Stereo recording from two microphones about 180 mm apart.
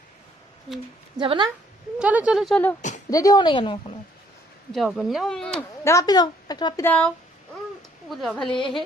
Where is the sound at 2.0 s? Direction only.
5° right (ahead or behind).